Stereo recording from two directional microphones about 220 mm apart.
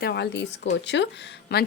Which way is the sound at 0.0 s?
50° left (ahead or behind).